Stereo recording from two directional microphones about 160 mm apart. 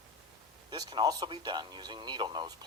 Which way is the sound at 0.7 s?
25° right (ahead or behind).